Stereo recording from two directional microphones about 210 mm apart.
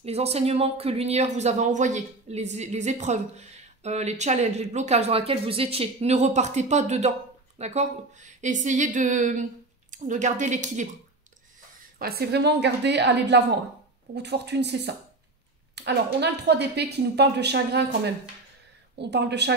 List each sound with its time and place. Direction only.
0.0 s speech: 30° right (ahead or behind)
12.0 s a woman's voice: 50° right (ahead or behind)